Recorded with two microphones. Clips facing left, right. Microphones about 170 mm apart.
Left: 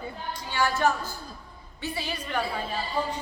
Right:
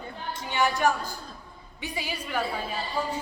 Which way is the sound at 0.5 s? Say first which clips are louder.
Even; 15° right (ahead or behind).